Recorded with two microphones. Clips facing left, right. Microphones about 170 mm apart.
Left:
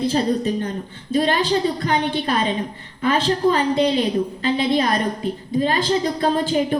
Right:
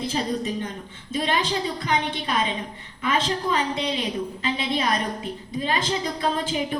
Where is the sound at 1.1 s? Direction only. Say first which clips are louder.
Left 6 dB; 35° left (ahead or behind).